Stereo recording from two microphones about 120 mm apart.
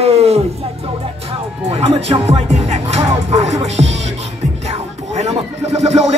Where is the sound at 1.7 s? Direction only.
60° right (ahead or behind).